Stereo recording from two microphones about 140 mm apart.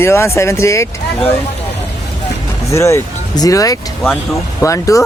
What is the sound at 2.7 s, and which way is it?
A man's voice, 20° left (ahead or behind).